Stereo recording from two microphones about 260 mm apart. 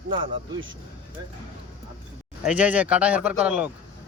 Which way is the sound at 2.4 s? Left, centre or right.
Centre.